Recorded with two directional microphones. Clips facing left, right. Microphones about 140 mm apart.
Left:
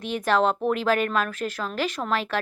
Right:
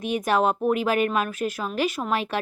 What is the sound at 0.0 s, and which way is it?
Speech, 15° right (ahead or behind).